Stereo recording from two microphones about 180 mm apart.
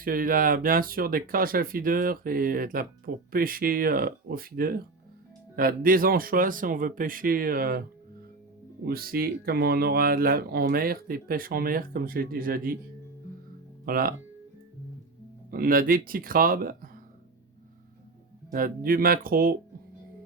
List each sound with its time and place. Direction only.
0.0 s speech: 50° right (ahead or behind)
8.8 s speech: 55° right (ahead or behind)
13.8 s speech: 55° right (ahead or behind)
15.4 s speech: 55° right (ahead or behind)
18.5 s speech: 50° right (ahead or behind)